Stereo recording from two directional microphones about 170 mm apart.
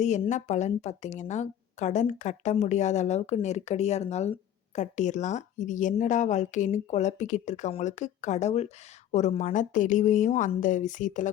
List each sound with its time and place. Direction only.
0.0 s a woman's voice: 45° left (ahead or behind)